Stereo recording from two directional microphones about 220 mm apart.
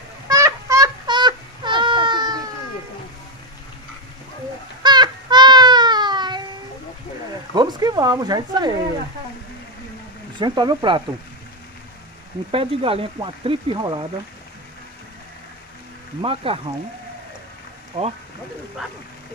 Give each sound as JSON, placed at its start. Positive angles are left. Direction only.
{"t": 0.3, "sound": "child singing", "side_deg": -15}
{"t": 4.8, "sound": "a sound", "side_deg": -20}
{"t": 7.5, "sound": "speech", "side_deg": -20}
{"t": 10.4, "sound": "speech", "side_deg": -20}
{"t": 12.4, "sound": "speech", "side_deg": -25}
{"t": 16.2, "sound": "speech", "side_deg": -25}
{"t": 17.9, "sound": "speech", "side_deg": -30}